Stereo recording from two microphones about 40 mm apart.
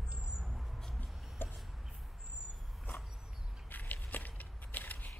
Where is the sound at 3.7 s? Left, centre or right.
Left.